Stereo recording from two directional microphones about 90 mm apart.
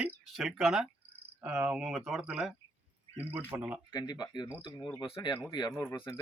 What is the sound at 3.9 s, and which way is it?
Speech, 50° left (ahead or behind).